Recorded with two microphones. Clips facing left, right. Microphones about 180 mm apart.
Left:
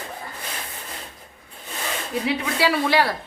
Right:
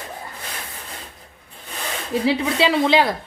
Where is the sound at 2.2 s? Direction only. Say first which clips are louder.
Right 4 dB; 25° right (ahead or behind).